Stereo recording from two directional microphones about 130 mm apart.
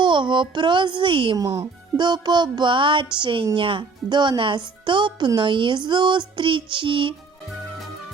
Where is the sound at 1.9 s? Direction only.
35° right (ahead or behind).